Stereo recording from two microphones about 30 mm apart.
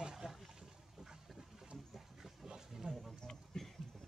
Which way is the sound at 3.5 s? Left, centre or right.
Left.